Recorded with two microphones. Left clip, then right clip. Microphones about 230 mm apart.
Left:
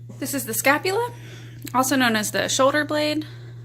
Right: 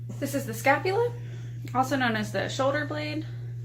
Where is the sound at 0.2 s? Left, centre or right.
Left.